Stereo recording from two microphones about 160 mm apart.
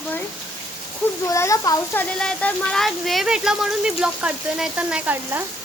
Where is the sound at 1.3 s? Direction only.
20° left (ahead or behind).